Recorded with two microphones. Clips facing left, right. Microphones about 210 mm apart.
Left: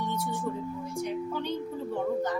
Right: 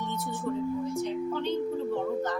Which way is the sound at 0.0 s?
10° left (ahead or behind).